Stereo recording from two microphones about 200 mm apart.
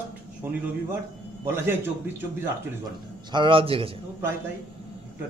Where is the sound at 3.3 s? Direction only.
25° right (ahead or behind).